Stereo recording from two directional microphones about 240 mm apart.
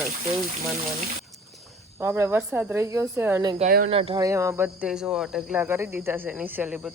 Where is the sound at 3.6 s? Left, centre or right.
Right.